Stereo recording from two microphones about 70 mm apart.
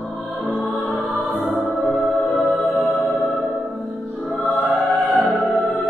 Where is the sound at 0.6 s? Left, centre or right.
Left.